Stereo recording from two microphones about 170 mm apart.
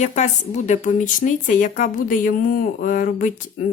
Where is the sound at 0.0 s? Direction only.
45° left (ahead or behind).